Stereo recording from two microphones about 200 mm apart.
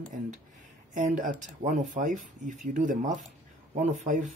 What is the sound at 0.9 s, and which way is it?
Speech, 40° right (ahead or behind).